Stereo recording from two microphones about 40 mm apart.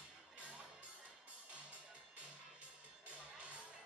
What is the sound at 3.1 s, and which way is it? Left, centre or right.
Music, right.